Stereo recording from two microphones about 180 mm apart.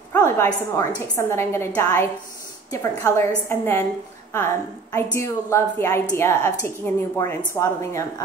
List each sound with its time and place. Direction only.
0.1 s a woman's voice: 15° left (ahead or behind)
4.9 s a woman's voice: 15° left (ahead or behind)